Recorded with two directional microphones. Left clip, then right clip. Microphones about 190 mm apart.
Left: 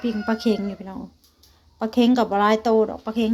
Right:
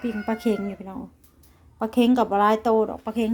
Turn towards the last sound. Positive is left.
turn(degrees=-20)  # may be behind; listen again after turning